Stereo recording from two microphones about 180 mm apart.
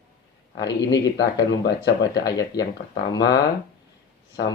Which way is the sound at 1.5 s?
70° left (ahead or behind).